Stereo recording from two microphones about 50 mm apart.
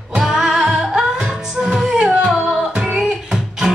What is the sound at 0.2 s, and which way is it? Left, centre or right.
Music, centre.